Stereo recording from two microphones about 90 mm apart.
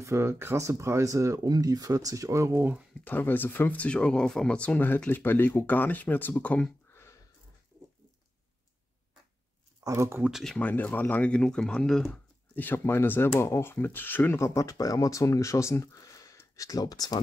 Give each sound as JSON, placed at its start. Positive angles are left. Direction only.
{"t": 0.0, "sound": "speech", "side_deg": -35}
{"t": 3.0, "sound": "speech", "side_deg": 20}
{"t": 6.9, "sound": "a sound", "side_deg": 30}
{"t": 9.8, "sound": "speech", "side_deg": -30}
{"t": 10.3, "sound": "speech", "side_deg": 5}
{"t": 10.6, "sound": "speech", "side_deg": 20}
{"t": 12.5, "sound": "speech", "side_deg": 20}
{"t": 14.4, "sound": "speech", "side_deg": 35}